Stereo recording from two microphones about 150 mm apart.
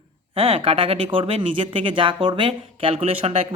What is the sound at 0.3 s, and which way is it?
Speech, 40° right (ahead or behind).